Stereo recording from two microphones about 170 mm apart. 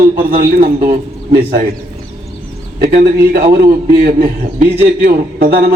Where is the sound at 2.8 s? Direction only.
60° right (ahead or behind).